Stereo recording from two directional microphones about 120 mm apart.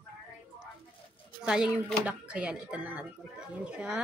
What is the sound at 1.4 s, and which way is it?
Speech, 5° right (ahead or behind).